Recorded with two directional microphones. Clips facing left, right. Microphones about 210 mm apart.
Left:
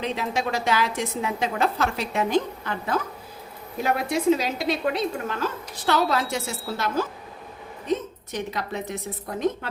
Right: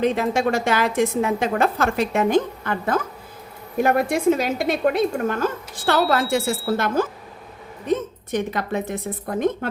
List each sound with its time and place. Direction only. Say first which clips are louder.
0.0 s a woman's voice: right 7 dB; 50° right (ahead or behind)